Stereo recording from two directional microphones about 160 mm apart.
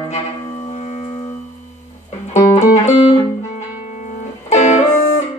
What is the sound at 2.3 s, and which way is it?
Music, 45° left (ahead or behind).